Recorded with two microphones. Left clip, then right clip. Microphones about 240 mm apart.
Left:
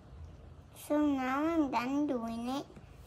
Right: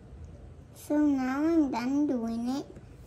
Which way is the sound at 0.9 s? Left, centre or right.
Left.